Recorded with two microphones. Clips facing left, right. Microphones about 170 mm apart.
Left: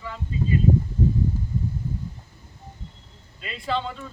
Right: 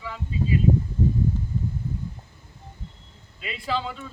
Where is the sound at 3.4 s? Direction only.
5° right (ahead or behind).